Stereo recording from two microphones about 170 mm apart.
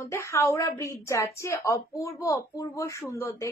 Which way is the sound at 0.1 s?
15° left (ahead or behind).